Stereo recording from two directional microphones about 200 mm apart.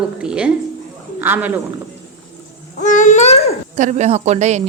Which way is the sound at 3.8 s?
35° right (ahead or behind).